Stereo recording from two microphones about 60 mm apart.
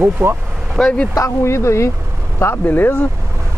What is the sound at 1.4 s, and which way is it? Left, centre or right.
Speech, left.